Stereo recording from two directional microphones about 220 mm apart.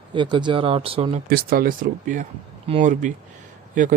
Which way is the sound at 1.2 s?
45° right (ahead or behind).